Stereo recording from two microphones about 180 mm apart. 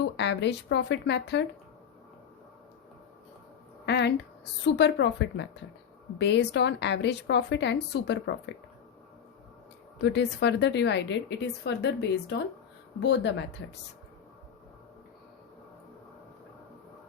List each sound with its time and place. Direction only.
0.0 s a woman's voice: 70° left (ahead or behind)
3.8 s a woman's voice: 70° left (ahead or behind)
10.0 s a woman's voice: 70° left (ahead or behind)